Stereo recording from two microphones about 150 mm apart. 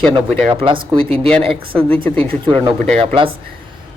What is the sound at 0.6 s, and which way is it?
Speech, 35° right (ahead or behind).